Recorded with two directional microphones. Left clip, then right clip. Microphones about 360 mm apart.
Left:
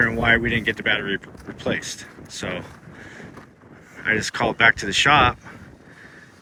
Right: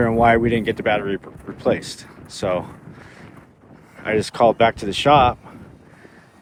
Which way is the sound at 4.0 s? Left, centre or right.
Centre.